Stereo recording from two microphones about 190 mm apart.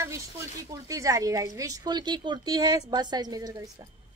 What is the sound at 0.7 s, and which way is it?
A woman's voice, 15° right (ahead or behind).